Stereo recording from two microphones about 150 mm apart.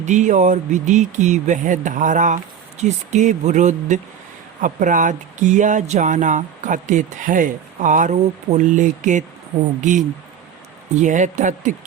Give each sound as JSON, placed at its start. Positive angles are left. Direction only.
{"t": 0.0, "sound": "speech", "side_deg": -55}